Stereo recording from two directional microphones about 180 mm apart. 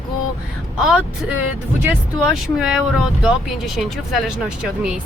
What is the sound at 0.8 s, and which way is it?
Speech, 5° right (ahead or behind).